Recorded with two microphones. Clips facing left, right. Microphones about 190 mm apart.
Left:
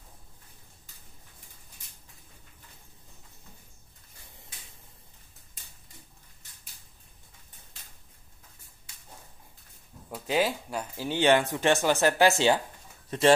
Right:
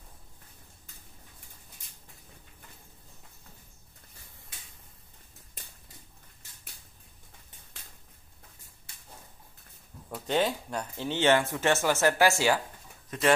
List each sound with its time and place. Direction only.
10.1 s speech: 5° left (ahead or behind)
13.1 s speech: 30° left (ahead or behind)